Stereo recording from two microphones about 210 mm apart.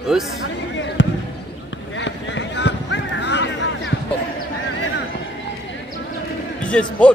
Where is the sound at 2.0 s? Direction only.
60° left (ahead or behind).